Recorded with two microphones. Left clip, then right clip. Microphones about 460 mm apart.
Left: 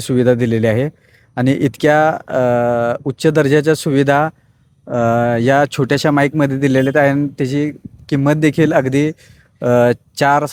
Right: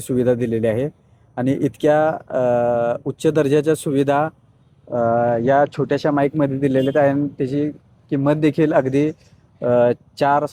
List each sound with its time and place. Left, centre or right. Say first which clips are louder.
0.0 s speech: left 4 dB; left